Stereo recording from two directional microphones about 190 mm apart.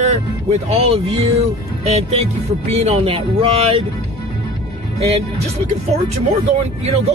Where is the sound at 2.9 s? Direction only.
30° right (ahead or behind).